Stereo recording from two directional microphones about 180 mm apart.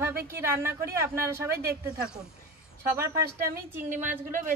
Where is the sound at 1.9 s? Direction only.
5° right (ahead or behind).